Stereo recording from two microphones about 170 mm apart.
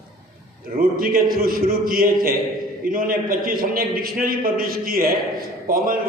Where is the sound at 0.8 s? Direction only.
55° right (ahead or behind).